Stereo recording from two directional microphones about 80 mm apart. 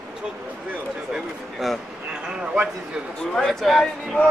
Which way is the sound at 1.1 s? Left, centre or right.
Centre.